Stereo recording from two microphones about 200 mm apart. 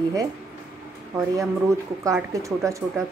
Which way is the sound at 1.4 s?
15° right (ahead or behind).